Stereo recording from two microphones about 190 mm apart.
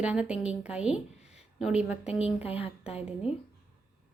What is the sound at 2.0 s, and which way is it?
Speech, 30° left (ahead or behind).